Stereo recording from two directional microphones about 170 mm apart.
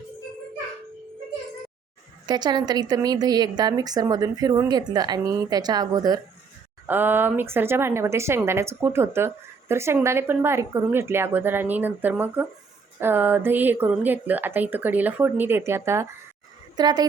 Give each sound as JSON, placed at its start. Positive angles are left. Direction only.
{"t": 2.2, "sound": "a woman's voice", "side_deg": -25}
{"t": 6.8, "sound": "a woman's voice", "side_deg": -10}